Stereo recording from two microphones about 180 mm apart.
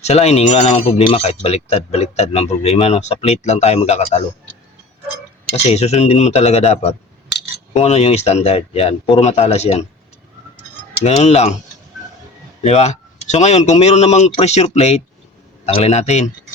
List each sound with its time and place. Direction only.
0.0 s speech: 40° left (ahead or behind)
5.6 s speech: 35° left (ahead or behind)
11.0 s speech: 40° left (ahead or behind)
12.6 s speech: 35° left (ahead or behind)